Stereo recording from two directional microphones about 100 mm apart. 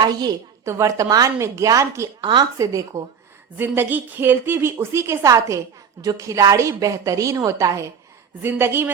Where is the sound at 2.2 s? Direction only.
50° right (ahead or behind).